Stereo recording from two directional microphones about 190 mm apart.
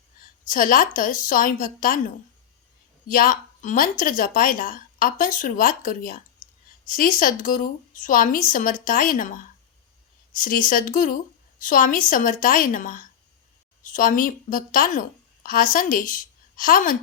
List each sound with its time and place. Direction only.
0.4 s a woman's voice: 45° left (ahead or behind)
3.1 s a woman's voice: 45° left (ahead or behind)